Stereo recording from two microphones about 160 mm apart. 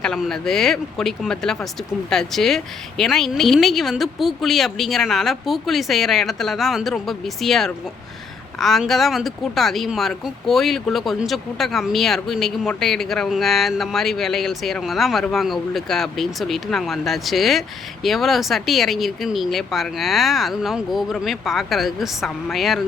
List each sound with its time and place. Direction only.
0.0 s speech: 5° left (ahead or behind)